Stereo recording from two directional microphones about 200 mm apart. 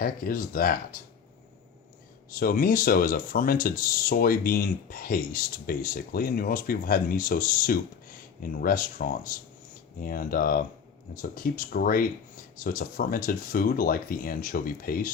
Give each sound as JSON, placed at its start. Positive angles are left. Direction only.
{"t": 0.0, "sound": "speech", "side_deg": 45}
{"t": 2.3, "sound": "speech", "side_deg": 45}